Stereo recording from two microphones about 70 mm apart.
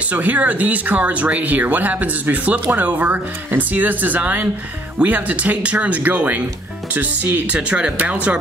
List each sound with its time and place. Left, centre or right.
0.1 s speech: right